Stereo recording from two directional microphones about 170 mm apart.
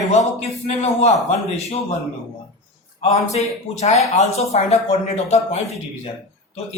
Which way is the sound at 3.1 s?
40° left (ahead or behind).